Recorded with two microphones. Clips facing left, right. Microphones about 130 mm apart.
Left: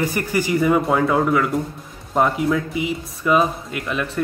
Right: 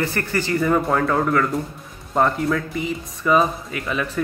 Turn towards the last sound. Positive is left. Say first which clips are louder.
# even
turn(degrees=0)  # may be behind; listen again after turning